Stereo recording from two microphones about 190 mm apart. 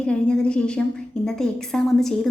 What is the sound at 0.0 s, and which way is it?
A woman's voice, 5° left (ahead or behind).